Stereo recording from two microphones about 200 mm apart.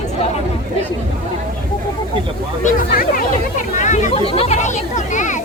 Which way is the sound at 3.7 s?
35° left (ahead or behind).